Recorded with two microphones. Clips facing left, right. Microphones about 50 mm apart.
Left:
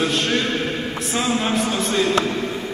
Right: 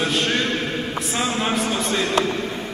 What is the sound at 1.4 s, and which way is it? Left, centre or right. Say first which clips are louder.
Speech: left 1 dB; centre.